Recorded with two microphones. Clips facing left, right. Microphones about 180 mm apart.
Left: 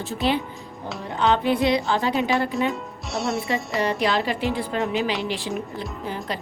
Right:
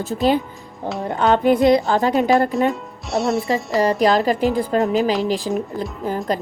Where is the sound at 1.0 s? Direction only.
50° right (ahead or behind).